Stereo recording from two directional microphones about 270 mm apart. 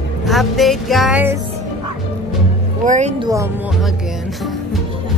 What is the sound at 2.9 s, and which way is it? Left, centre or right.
Speech, right.